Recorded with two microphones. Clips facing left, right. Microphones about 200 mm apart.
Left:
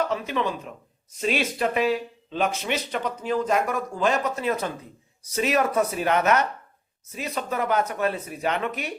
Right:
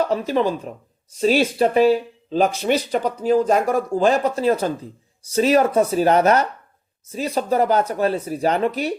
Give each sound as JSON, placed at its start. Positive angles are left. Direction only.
{"t": 0.0, "sound": "speech", "side_deg": -35}